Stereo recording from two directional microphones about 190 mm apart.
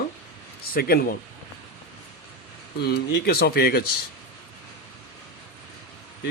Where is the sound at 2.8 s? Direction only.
55° left (ahead or behind).